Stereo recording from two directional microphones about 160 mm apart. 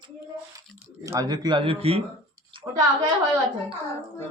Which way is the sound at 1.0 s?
20° right (ahead or behind).